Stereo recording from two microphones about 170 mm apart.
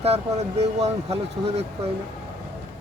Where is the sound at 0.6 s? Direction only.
40° right (ahead or behind).